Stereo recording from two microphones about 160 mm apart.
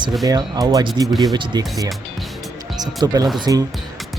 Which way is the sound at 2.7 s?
25° right (ahead or behind).